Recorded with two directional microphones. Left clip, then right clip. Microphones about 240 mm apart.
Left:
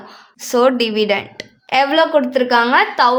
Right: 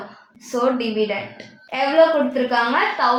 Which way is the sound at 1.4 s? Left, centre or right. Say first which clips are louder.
Left 8 dB; left.